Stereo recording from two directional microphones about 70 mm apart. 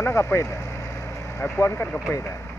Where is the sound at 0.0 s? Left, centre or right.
Left.